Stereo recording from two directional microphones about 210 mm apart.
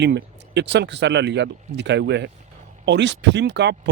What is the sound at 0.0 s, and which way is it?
Speech, 55° right (ahead or behind).